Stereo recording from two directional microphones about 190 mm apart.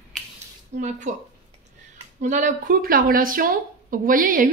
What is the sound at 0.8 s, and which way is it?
Speech, 40° right (ahead or behind).